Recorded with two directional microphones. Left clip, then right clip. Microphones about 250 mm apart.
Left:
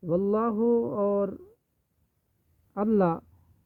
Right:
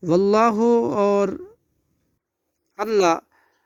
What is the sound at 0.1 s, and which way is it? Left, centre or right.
Speech, right.